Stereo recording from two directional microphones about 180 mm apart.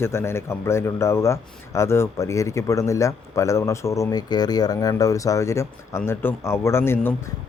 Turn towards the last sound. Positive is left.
turn(degrees=15)  # may be behind; listen again after turning